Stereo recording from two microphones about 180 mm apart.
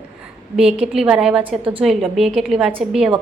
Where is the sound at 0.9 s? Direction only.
5° right (ahead or behind).